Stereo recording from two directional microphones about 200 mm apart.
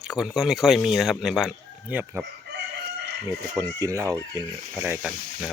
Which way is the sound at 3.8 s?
15° right (ahead or behind).